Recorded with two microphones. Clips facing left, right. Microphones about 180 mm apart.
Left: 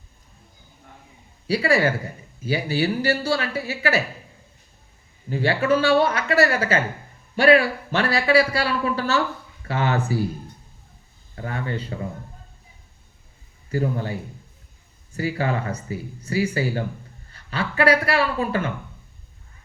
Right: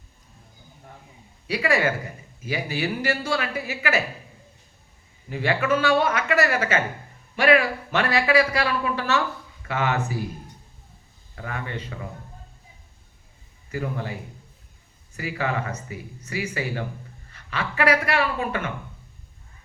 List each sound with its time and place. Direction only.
1.5 s a man's voice: 35° left (ahead or behind)
5.3 s a man's voice: 35° left (ahead or behind)
11.3 s a man's voice: 35° left (ahead or behind)
13.7 s a man's voice: 35° left (ahead or behind)